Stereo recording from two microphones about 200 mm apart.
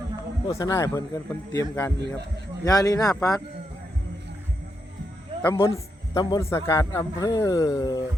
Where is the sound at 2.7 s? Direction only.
15° left (ahead or behind).